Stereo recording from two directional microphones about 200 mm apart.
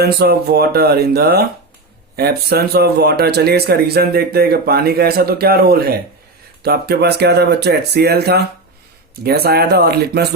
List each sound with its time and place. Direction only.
0.0 s speech: 50° right (ahead or behind)